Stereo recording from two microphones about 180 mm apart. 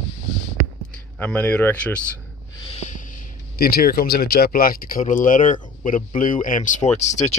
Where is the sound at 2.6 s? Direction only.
35° left (ahead or behind).